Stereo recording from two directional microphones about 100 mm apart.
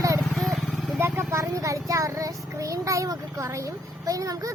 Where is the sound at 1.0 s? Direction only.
25° right (ahead or behind).